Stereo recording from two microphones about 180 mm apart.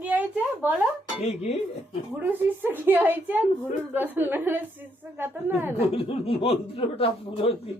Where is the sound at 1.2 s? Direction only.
35° left (ahead or behind).